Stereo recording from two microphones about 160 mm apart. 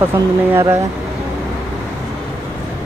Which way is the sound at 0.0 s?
15° right (ahead or behind).